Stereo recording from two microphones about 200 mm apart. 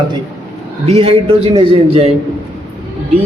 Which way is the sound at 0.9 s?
30° right (ahead or behind).